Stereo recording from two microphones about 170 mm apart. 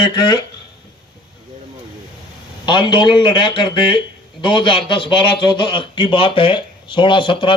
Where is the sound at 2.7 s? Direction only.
30° left (ahead or behind).